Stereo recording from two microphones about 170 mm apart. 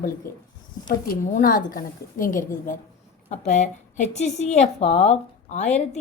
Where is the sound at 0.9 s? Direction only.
50° left (ahead or behind).